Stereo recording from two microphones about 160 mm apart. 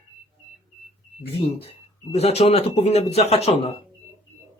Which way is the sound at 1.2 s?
40° left (ahead or behind).